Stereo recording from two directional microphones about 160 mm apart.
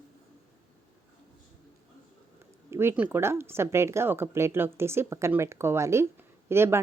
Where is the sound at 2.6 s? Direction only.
15° right (ahead or behind).